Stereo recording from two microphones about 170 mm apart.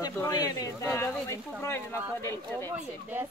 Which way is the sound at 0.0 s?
20° left (ahead or behind).